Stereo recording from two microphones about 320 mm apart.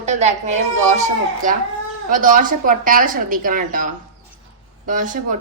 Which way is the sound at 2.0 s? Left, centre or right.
Right.